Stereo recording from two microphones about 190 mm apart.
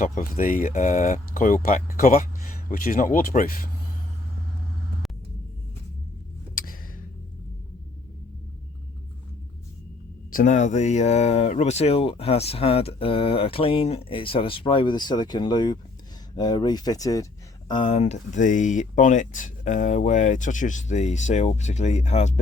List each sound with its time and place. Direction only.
0.0 s speech: 45° left (ahead or behind)
6.5 s a sound: 45° left (ahead or behind)
10.3 s speech: 40° left (ahead or behind)